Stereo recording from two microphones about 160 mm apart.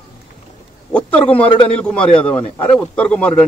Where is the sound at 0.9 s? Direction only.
10° left (ahead or behind).